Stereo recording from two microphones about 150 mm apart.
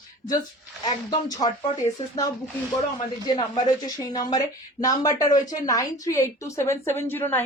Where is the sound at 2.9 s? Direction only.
30° left (ahead or behind).